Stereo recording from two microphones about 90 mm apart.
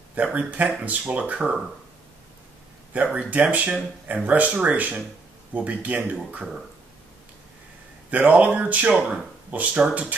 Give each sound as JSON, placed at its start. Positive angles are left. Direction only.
{"t": 0.1, "sound": "speech", "side_deg": -20}
{"t": 2.9, "sound": "speech", "side_deg": -15}
{"t": 8.1, "sound": "speech", "side_deg": -15}